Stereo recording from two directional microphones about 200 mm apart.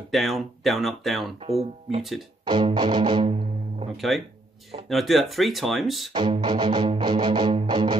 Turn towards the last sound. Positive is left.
turn(degrees=-25)  # may be behind; listen again after turning